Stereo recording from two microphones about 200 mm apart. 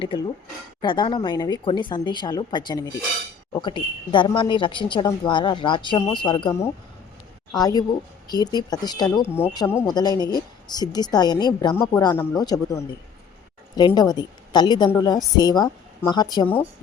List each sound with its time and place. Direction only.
0.8 s a woman's voice: 25° left (ahead or behind)